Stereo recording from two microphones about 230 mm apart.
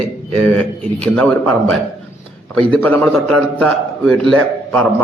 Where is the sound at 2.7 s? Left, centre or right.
Centre.